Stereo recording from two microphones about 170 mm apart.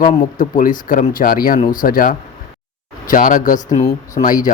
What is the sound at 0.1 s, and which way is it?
Speech, 55° left (ahead or behind).